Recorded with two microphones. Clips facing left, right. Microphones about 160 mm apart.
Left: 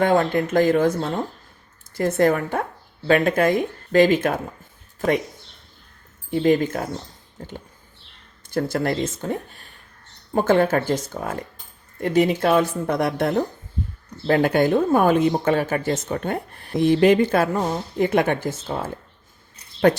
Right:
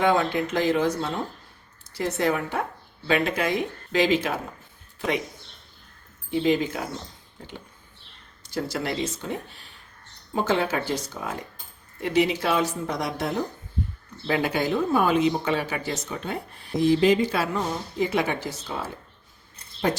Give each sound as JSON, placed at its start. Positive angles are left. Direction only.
{"t": 0.0, "sound": "speech", "side_deg": 50}
{"t": 6.3, "sound": "speech", "side_deg": 50}
{"t": 8.4, "sound": "speech", "side_deg": 50}